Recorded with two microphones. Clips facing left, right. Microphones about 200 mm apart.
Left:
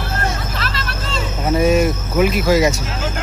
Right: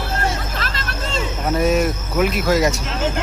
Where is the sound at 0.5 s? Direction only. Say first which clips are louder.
Left 1 dB; 45° right (ahead or behind).